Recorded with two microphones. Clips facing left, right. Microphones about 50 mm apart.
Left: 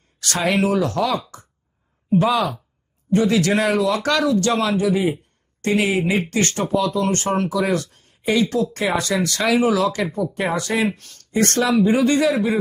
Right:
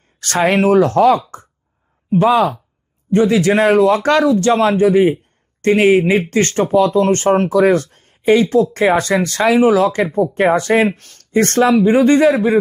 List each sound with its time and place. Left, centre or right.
0.2 s speech: right